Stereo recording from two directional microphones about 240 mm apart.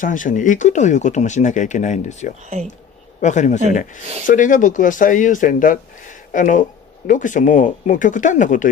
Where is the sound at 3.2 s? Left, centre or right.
Left.